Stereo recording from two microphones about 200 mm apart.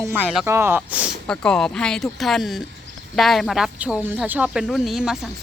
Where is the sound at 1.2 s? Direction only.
5° left (ahead or behind).